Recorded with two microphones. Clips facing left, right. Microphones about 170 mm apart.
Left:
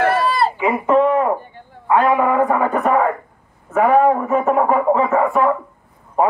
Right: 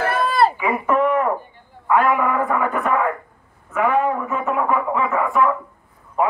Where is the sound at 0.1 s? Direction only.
55° right (ahead or behind).